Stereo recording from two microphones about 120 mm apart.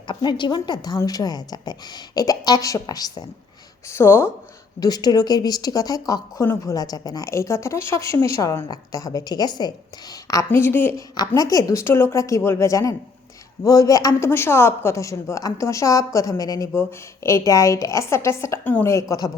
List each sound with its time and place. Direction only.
0.1 s a woman's voice: 40° left (ahead or behind)
3.8 s speech: 20° left (ahead or behind)
4.8 s a woman's voice: 35° left (ahead or behind); by 11.0 s 20° left (ahead or behind)
11.3 s speech: 30° left (ahead or behind)